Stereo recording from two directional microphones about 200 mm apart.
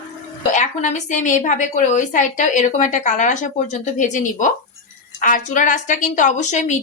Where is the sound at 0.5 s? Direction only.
40° left (ahead or behind).